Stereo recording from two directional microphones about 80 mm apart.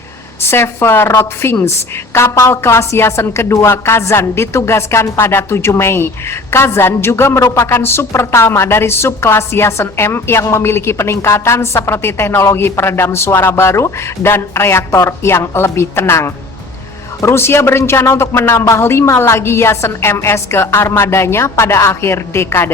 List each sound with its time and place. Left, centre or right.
0.4 s a woman's voice: left
14.9 s speech: left
15.3 s a woman's voice: left